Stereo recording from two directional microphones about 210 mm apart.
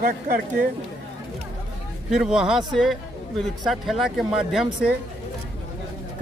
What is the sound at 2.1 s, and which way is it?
Speech, 5° right (ahead or behind).